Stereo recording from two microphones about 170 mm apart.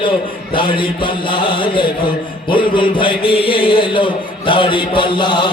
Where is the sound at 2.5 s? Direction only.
30° left (ahead or behind).